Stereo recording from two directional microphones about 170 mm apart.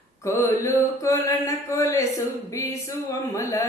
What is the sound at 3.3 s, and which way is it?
Speech, 20° left (ahead or behind).